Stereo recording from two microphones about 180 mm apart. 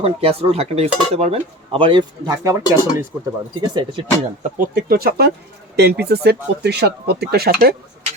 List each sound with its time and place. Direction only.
0.0 s speech: 35° right (ahead or behind)
4.4 s speech: 50° right (ahead or behind)
4.8 s speech: 60° right (ahead or behind)